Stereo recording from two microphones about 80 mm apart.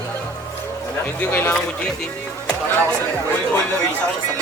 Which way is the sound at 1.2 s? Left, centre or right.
Left.